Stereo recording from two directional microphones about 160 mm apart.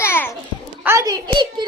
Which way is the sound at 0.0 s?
15° left (ahead or behind).